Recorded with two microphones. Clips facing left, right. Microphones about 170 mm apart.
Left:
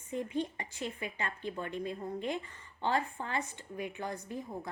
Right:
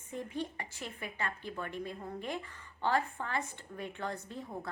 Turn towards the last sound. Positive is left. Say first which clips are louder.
# left 1 dB
turn(degrees=10)  # may be behind; listen again after turning